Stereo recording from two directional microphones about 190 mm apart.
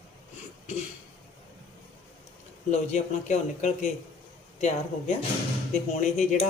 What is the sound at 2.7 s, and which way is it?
A man's voice, 35° left (ahead or behind).